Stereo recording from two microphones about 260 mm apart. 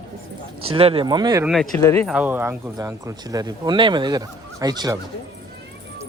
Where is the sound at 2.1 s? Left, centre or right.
Centre.